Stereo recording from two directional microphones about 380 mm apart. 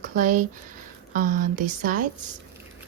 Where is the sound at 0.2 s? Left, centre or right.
Centre.